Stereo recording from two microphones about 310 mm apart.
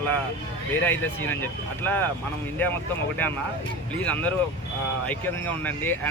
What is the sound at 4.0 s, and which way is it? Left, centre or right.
Speech, centre.